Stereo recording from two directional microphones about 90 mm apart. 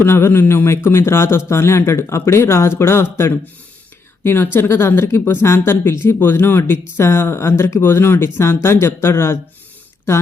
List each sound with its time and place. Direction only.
0.0 s a man's voice: 25° left (ahead or behind)